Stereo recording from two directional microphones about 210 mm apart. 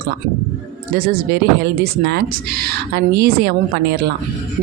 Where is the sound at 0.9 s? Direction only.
45° right (ahead or behind).